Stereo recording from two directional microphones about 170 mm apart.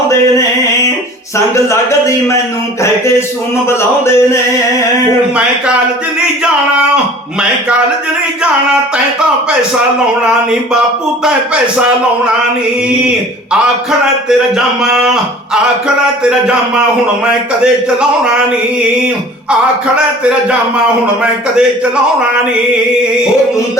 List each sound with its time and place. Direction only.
1.7 s speech: 15° left (ahead or behind)
3.7 s speech: 15° left (ahead or behind)
14.8 s speech: 5° right (ahead or behind)